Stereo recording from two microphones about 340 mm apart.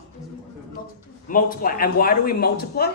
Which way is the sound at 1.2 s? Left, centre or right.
Left.